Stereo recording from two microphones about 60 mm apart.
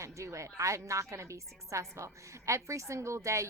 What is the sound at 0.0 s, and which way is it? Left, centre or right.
A woman's voice, right.